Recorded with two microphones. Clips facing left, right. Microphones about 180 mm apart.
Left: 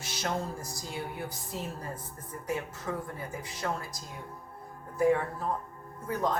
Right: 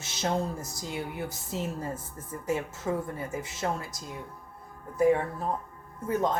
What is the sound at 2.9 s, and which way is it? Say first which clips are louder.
Speech: right 6 dB; 25° right (ahead or behind).